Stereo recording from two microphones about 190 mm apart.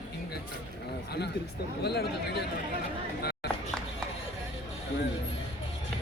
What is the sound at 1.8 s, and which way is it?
Speech, 60° left (ahead or behind).